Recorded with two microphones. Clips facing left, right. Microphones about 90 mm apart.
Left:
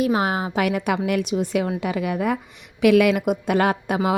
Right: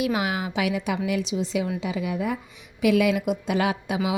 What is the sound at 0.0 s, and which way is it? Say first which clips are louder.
Speech: left 4 dB; 40° left (ahead or behind).